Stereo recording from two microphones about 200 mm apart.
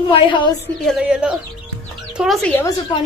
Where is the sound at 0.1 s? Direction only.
25° left (ahead or behind).